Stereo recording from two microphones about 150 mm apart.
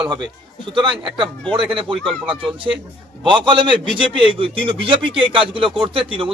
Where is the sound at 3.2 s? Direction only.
35° right (ahead or behind).